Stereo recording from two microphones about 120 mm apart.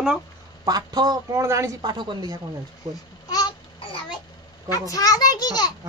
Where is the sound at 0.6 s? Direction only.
35° right (ahead or behind).